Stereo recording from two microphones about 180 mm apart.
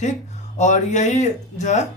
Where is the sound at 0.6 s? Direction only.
40° left (ahead or behind).